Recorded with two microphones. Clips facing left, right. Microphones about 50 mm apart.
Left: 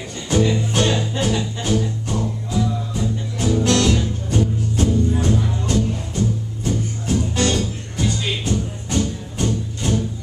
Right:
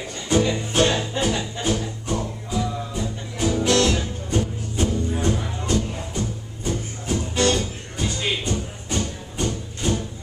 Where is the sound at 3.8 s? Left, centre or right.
Centre.